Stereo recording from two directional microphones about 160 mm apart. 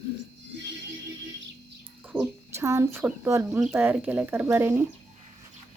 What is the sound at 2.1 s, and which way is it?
Speech, 5° right (ahead or behind).